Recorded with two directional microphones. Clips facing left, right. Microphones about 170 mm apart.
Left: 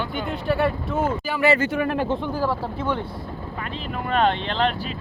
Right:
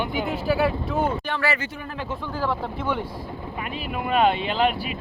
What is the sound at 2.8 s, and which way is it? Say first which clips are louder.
Speech: left 1 dB; 5° right (ahead or behind).